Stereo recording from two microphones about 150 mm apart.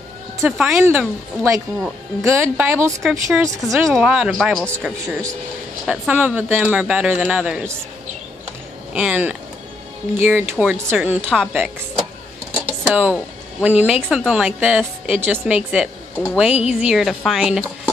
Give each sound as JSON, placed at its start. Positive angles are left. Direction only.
{"t": 0.4, "sound": "a woman's voice", "side_deg": -10}
{"t": 3.0, "sound": "speech", "side_deg": 0}
{"t": 5.0, "sound": "a woman's voice", "side_deg": -20}
{"t": 8.9, "sound": "a woman's voice", "side_deg": -10}
{"t": 12.6, "sound": "a sound", "side_deg": -10}
{"t": 13.7, "sound": "a woman's voice", "side_deg": -10}